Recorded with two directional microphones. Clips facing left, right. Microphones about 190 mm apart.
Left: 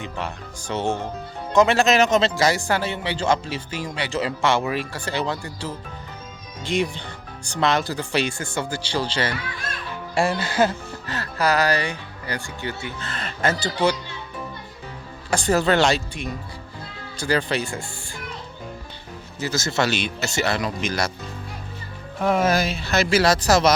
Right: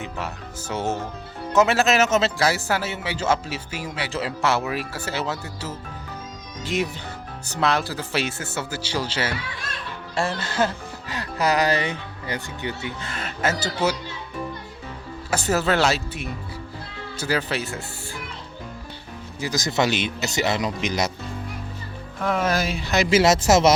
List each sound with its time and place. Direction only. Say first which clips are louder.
0.7 s a man's voice: left 2 dB; 10° right (ahead or behind)
10.2 s speech: left 3 dB; 10° left (ahead or behind)
11.0 s speech: left 1 dB; 15° right (ahead or behind)
15.3 s a man's voice: left 2 dB; 5° right (ahead or behind)
19.4 s a man's voice: even; 15° right (ahead or behind)
22.2 s speech: left 3 dB; 10° left (ahead or behind)
22.6 s a man's voice: even; 15° right (ahead or behind)